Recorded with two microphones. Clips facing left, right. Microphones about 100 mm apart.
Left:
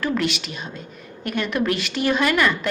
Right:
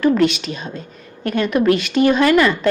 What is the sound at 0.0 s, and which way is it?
A woman's voice, 25° right (ahead or behind).